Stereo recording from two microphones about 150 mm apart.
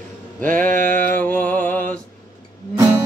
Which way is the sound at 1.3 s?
10° left (ahead or behind).